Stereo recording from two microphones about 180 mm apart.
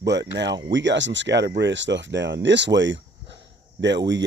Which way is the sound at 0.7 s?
90° right.